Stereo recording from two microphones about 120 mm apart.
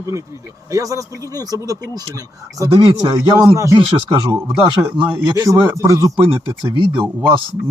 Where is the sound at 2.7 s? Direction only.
50° right (ahead or behind).